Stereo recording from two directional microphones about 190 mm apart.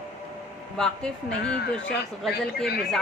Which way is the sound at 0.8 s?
Centre (ahead or behind).